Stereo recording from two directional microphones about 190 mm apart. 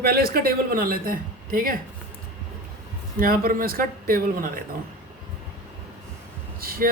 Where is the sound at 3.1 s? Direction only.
50° right (ahead or behind).